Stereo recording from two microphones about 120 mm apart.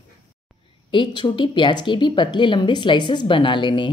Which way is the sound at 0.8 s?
40° left (ahead or behind).